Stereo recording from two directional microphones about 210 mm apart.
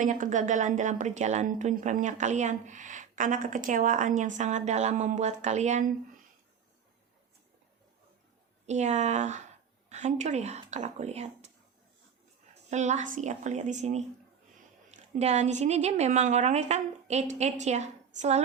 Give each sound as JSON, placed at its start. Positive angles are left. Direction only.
{"t": 0.0, "sound": "a woman's voice", "side_deg": -35}
{"t": 8.6, "sound": "a woman's voice", "side_deg": -35}
{"t": 12.7, "sound": "a woman's voice", "side_deg": -35}